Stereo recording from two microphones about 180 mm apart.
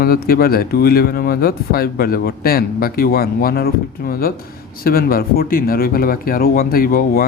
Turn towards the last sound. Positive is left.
turn(degrees=55)  # may be behind; listen again after turning